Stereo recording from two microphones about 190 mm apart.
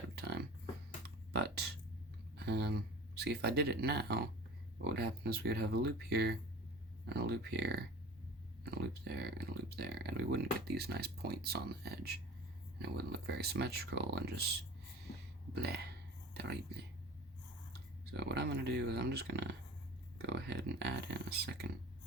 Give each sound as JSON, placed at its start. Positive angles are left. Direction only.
{"t": 0.2, "sound": "a sound", "side_deg": -55}
{"t": 4.8, "sound": "speech", "side_deg": -60}
{"t": 15.5, "sound": "speech", "side_deg": -60}
{"t": 16.3, "sound": "whispering", "side_deg": -60}
{"t": 18.1, "sound": "speech", "side_deg": -60}